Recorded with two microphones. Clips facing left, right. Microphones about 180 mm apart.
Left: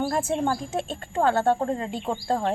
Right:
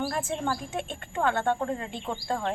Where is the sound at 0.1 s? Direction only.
40° left (ahead or behind).